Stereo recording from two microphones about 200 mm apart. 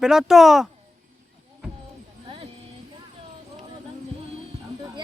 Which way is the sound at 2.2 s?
25° right (ahead or behind).